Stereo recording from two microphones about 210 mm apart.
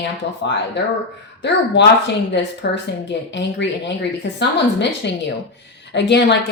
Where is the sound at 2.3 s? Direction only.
55° left (ahead or behind).